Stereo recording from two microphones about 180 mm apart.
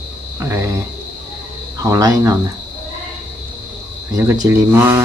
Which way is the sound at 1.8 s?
20° right (ahead or behind).